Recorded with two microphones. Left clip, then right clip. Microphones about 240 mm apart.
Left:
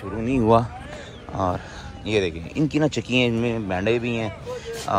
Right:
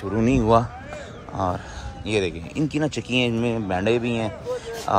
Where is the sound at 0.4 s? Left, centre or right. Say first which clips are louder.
Left 2 dB; centre.